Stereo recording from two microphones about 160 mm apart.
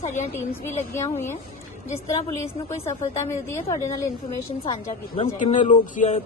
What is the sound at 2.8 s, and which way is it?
Speech, 15° left (ahead or behind).